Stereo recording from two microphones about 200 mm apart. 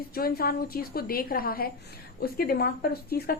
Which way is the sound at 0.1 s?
50° left (ahead or behind).